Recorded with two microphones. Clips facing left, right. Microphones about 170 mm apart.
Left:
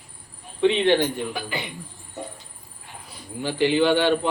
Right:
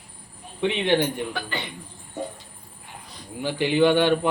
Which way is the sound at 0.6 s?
15° right (ahead or behind).